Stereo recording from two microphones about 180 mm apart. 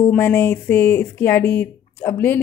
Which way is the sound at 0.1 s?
10° left (ahead or behind).